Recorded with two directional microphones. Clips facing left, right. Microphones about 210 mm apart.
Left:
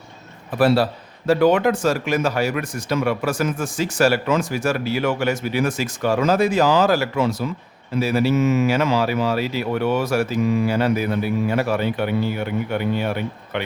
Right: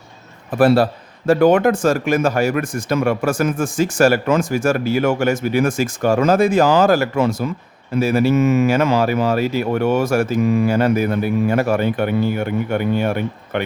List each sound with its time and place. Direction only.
0.6 s speech: 50° right (ahead or behind)